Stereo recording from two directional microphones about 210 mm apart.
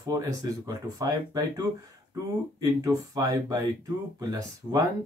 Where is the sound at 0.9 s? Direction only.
20° right (ahead or behind).